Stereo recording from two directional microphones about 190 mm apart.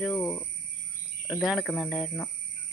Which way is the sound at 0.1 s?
20° left (ahead or behind).